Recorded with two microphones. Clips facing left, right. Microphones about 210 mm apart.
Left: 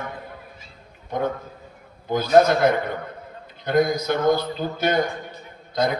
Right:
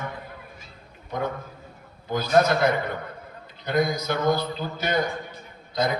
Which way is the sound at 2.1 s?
50° left (ahead or behind).